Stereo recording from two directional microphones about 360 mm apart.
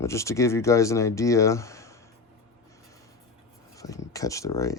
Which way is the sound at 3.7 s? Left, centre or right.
Centre.